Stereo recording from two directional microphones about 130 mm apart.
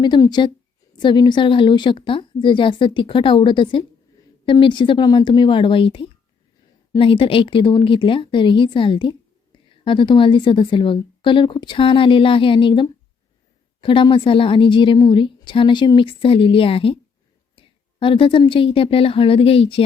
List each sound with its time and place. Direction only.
0.0 s speech: 35° left (ahead or behind)
18.0 s speech: 40° left (ahead or behind)